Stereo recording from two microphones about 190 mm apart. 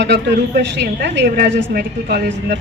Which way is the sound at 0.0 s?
65° right (ahead or behind).